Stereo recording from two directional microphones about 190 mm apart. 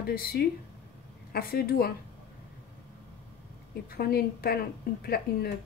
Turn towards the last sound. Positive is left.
turn(degrees=55)  # may be behind; listen again after turning